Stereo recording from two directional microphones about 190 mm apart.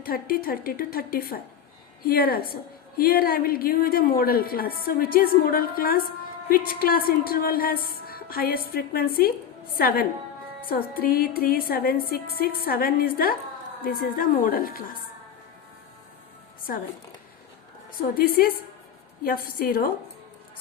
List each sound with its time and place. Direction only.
0.0 s a woman's voice: 50° left (ahead or behind)
18.1 s a woman's voice: 50° left (ahead or behind)